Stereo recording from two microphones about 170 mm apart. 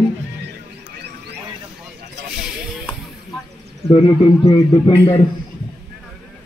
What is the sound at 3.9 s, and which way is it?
A man's voice, 20° left (ahead or behind).